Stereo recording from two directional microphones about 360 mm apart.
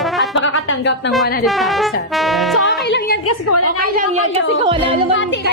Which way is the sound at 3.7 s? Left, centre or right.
Right.